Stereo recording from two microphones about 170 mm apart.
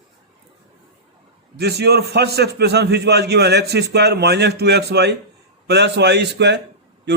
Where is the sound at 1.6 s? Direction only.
75° right (ahead or behind).